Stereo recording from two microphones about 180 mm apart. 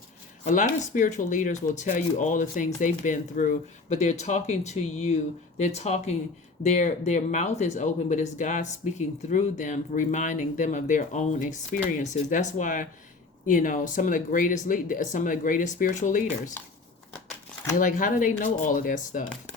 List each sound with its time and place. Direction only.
0.4 s speech: 45° left (ahead or behind)
17.7 s speech: 45° left (ahead or behind)